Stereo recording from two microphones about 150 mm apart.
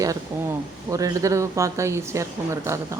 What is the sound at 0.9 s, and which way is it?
A woman's voice, 20° right (ahead or behind).